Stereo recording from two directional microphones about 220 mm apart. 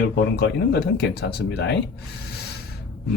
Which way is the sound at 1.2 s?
50° left (ahead or behind).